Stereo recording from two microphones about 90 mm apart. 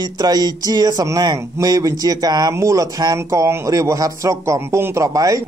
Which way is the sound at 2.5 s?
35° right (ahead or behind).